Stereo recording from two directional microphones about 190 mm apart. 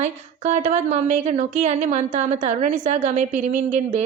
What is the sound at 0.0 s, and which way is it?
A woman's voice, 35° right (ahead or behind).